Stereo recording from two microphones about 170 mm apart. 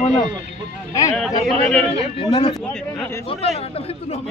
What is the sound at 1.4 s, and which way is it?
Speech, 5° left (ahead or behind).